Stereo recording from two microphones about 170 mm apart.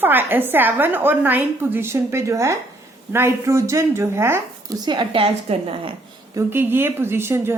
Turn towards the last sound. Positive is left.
turn(degrees=-15)  # may be behind; listen again after turning